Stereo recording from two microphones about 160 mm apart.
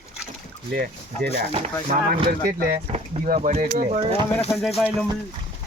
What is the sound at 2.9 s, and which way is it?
Speech, 45° right (ahead or behind).